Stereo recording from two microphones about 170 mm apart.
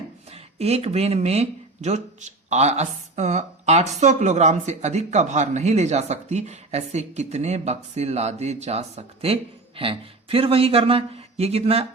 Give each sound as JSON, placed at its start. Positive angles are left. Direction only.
{"t": 0.3, "sound": "speech", "side_deg": -35}